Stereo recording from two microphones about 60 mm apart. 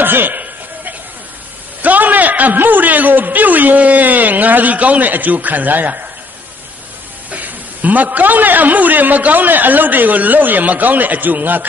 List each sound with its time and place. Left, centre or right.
0.0 s a sound: right
1.8 s a man's voice: right
7.2 s a man's voice: right